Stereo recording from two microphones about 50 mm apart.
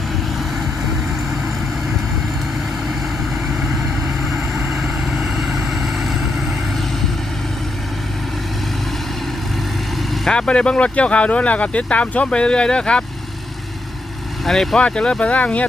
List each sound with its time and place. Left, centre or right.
4.7 s vehicle: centre
10.3 s speech: centre
14.4 s speech: centre
14.8 s speech: centre